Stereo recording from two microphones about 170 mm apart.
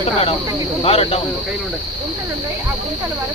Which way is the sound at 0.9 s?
35° left (ahead or behind).